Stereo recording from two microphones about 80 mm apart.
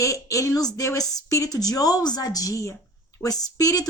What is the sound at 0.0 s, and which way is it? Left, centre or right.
Speech, left.